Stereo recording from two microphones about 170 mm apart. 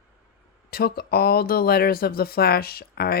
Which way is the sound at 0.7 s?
65° left (ahead or behind).